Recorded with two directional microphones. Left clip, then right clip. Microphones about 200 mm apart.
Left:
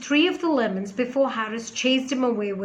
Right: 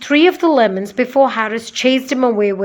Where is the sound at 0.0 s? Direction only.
40° right (ahead or behind).